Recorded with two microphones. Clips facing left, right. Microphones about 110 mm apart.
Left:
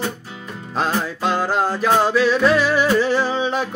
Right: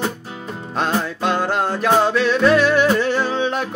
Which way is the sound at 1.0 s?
Centre (ahead or behind).